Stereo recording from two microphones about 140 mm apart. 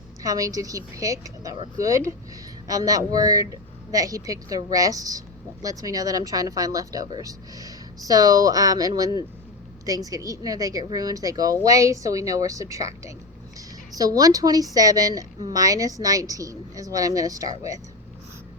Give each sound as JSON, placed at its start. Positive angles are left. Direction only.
{"t": 0.2, "sound": "a woman's voice", "side_deg": -25}